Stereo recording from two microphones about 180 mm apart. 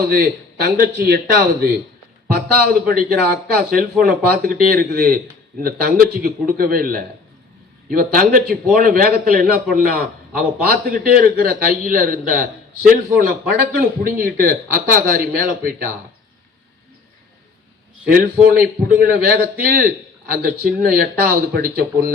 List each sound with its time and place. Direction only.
0.1 s a man's voice: 60° right (ahead or behind)
13.7 s a man's voice: 50° right (ahead or behind)
18.1 s a man's voice: 55° right (ahead or behind)